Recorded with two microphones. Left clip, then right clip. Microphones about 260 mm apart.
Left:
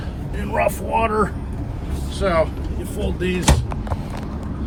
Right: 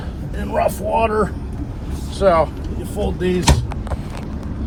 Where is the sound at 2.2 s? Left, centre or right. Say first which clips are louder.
Right 5 dB; centre.